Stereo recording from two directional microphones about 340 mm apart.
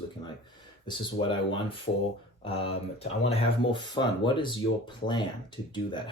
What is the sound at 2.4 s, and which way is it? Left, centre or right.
Speech, centre.